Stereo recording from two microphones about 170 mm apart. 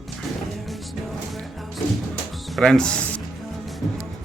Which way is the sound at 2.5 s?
5° left (ahead or behind).